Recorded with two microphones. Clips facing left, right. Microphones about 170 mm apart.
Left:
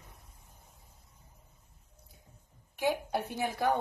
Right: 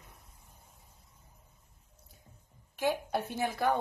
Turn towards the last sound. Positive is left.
turn(degrees=15)  # may be behind; listen again after turning